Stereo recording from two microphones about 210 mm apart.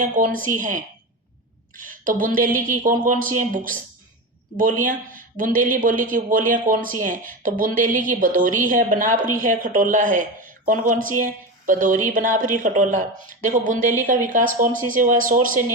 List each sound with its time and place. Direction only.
0.0 s speech: 40° right (ahead or behind)